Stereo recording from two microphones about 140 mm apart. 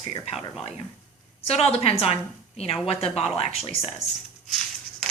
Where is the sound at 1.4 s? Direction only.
45° left (ahead or behind).